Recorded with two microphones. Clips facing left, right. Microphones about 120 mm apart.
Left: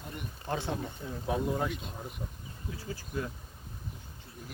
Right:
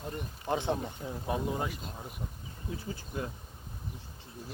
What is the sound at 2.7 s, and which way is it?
Speech, 25° right (ahead or behind).